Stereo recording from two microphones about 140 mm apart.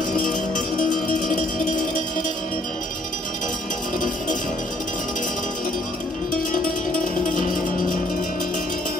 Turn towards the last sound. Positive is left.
turn(degrees=70)  # may be behind; listen again after turning